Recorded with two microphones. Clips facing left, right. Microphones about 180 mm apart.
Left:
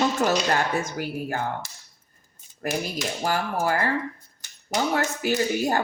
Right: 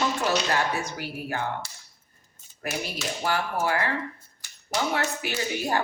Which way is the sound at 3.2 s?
45° left (ahead or behind).